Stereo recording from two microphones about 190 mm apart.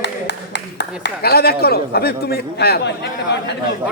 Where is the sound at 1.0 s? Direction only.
55° left (ahead or behind).